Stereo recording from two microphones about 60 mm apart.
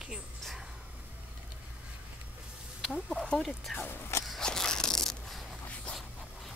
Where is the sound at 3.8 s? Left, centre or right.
Left.